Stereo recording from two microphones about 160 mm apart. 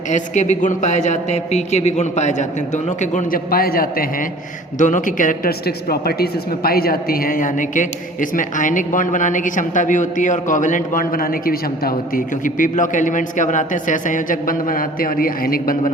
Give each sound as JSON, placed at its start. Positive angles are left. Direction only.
{"t": 0.1, "sound": "a man's voice", "side_deg": 50}
{"t": 4.8, "sound": "a woman's voice", "side_deg": 55}